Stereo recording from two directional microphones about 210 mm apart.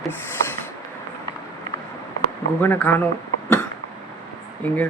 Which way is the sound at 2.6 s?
10° left (ahead or behind).